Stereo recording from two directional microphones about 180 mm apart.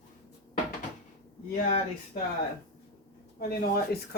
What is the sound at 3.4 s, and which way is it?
Speech, 60° left (ahead or behind).